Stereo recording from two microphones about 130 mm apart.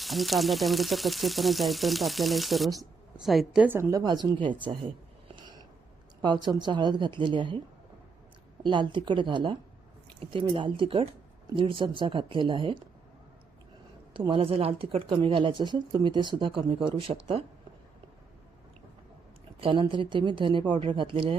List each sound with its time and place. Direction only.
0.0 s speech: centre (ahead or behind)
3.6 s speech: 15° right (ahead or behind)
4.0 s speech: 35° right (ahead or behind)
5.3 s a sound: 35° right (ahead or behind)
6.2 s speech: 35° right (ahead or behind)
8.6 s speech: 35° right (ahead or behind)
14.1 s speech: 40° right (ahead or behind)
19.5 s speech: 40° right (ahead or behind)